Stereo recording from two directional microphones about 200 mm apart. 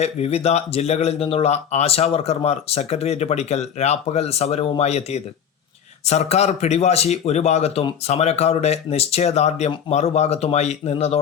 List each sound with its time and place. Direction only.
0.0 s speech: 30° left (ahead or behind)